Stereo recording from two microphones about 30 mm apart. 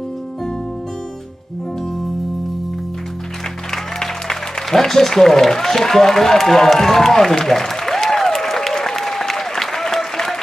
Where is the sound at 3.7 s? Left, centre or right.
Centre.